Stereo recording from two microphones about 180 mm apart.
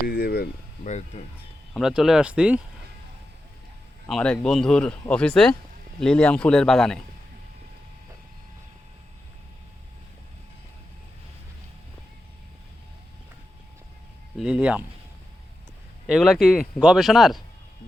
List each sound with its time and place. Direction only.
0.1 s speech: 60° left (ahead or behind)
0.9 s speech: 40° left (ahead or behind)
1.7 s speech: 5° right (ahead or behind)
4.1 s speech: 5° left (ahead or behind)
14.3 s speech: 5° right (ahead or behind)
16.0 s speech: centre (ahead or behind)